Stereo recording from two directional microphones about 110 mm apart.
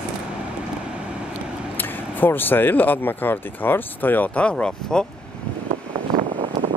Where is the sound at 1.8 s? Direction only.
20° left (ahead or behind).